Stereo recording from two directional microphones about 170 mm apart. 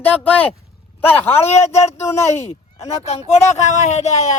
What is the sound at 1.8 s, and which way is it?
Speech, 40° left (ahead or behind).